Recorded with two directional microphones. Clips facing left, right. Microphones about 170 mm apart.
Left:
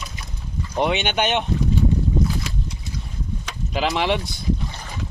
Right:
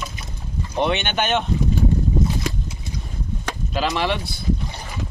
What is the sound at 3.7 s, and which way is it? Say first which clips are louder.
Speech: left 1 dB; 15° left (ahead or behind).